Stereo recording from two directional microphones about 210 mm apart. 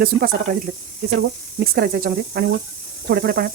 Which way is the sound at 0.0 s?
45° right (ahead or behind).